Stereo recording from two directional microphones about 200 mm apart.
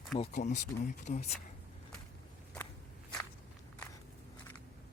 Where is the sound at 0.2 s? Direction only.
35° left (ahead or behind).